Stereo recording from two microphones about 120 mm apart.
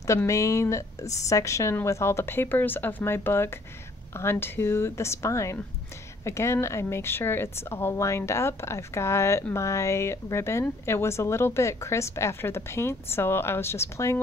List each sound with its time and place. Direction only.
0.3 s a woman's voice: 25° left (ahead or behind)